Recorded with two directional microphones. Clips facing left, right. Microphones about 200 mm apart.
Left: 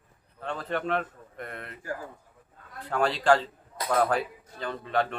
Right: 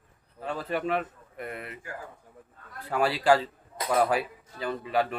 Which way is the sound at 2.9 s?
10° right (ahead or behind).